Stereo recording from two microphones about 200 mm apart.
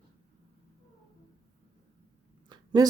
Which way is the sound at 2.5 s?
20° right (ahead or behind).